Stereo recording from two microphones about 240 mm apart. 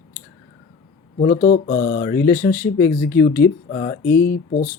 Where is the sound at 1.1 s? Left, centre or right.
Left.